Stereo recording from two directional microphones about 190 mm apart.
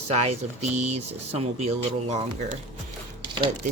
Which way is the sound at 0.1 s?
35° right (ahead or behind).